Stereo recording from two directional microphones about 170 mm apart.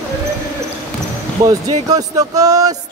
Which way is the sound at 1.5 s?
20° right (ahead or behind).